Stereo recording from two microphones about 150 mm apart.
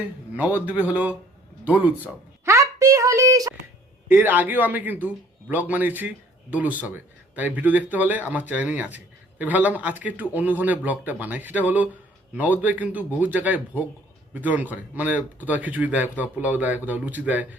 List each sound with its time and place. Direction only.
0.3 s a man's voice: 10° right (ahead or behind)
2.4 s a sound: 20° right (ahead or behind)
4.1 s speech: 10° right (ahead or behind)